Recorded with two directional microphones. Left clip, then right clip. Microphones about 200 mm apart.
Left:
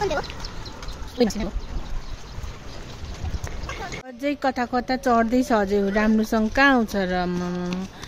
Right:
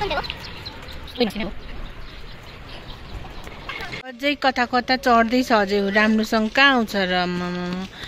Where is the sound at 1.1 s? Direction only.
20° left (ahead or behind).